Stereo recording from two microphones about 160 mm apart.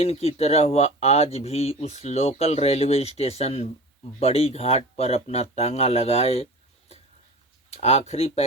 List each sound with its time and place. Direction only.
0.0 s speech: 40° left (ahead or behind)